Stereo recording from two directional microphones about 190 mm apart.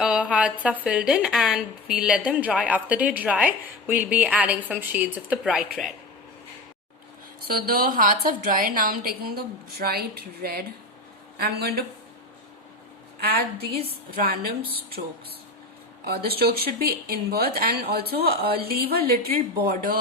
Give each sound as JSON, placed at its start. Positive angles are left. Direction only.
{"t": 0.0, "sound": "a woman's voice", "side_deg": -5}
{"t": 7.4, "sound": "a woman's voice", "side_deg": -50}
{"t": 13.2, "sound": "a woman's voice", "side_deg": -55}
{"t": 16.0, "sound": "speech", "side_deg": -55}